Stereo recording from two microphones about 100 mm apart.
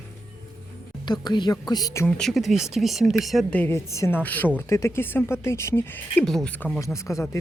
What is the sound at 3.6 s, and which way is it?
Speech, 30° left (ahead or behind).